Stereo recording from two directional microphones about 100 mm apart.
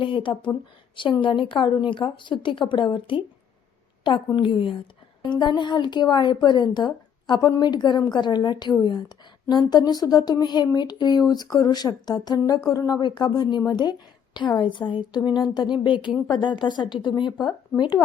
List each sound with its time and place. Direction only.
0.0 s a woman's voice: 60° left (ahead or behind)
4.4 s a woman's voice: 55° left (ahead or behind)